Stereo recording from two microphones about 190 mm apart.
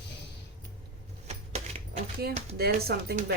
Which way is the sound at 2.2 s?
55° right (ahead or behind).